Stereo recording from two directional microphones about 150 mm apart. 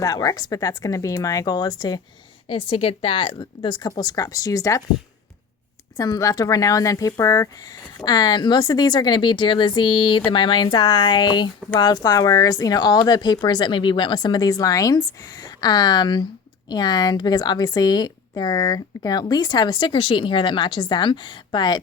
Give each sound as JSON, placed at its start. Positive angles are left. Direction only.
{"t": 0.0, "sound": "speech", "side_deg": 25}
{"t": 6.0, "sound": "speech", "side_deg": 20}